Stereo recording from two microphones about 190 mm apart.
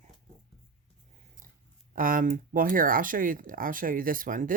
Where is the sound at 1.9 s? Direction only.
45° right (ahead or behind).